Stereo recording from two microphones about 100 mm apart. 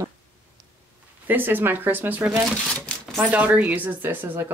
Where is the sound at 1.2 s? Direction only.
20° right (ahead or behind).